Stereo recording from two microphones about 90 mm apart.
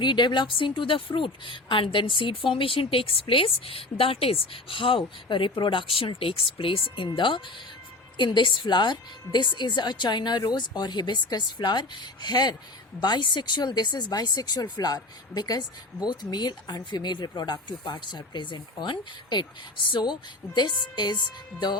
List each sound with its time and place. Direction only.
0.0 s a woman's voice: 60° left (ahead or behind)